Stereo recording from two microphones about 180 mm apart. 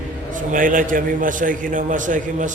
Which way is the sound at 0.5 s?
50° right (ahead or behind).